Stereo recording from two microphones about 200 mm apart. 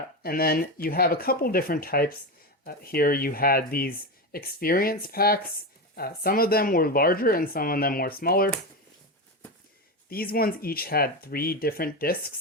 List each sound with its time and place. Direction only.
0.2 s speech: 50° left (ahead or behind)
10.1 s speech: 50° left (ahead or behind)